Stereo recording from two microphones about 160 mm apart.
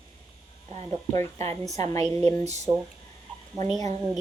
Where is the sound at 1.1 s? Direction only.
40° right (ahead or behind).